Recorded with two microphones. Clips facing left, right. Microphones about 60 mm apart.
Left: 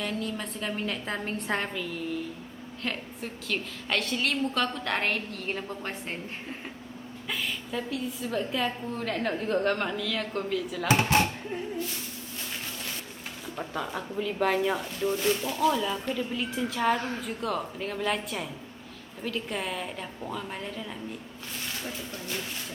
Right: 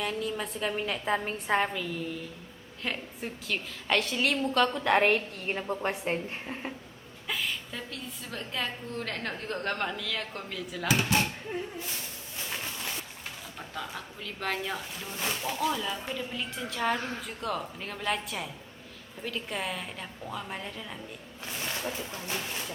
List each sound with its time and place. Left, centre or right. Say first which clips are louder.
0.0 s a woman's voice: even; centre
7.3 s a woman's voice: even; centre
13.6 s speech: left 6 dB; centre
15.1 s a woman's voice: left 4 dB; centre
15.5 s a woman's voice: left 5 dB; centre
21.8 s a woman's voice: right 1 dB; centre